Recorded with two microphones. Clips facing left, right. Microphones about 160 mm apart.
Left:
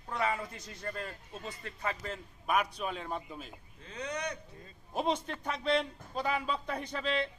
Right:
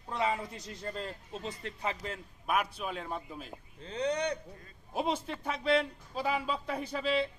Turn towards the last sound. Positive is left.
turn(degrees=-5)  # may be behind; listen again after turning